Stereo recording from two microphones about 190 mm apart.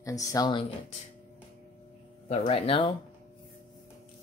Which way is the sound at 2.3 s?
30° left (ahead or behind).